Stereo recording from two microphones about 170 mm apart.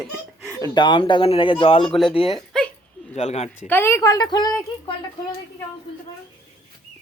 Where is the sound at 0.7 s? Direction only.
30° left (ahead or behind).